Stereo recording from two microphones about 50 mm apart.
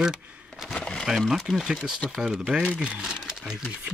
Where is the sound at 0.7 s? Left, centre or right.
Centre.